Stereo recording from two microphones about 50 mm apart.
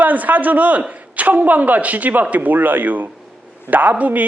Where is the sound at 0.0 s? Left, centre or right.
Right.